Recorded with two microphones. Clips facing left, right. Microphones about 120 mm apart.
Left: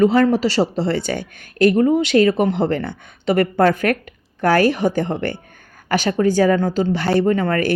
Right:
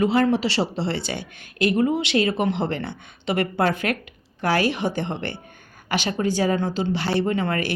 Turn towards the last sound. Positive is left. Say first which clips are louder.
# left 6 dB
turn(degrees=45)  # may be behind; listen again after turning